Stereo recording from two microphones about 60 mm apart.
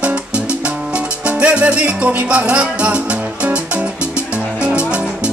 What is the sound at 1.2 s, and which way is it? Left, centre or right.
Music, centre.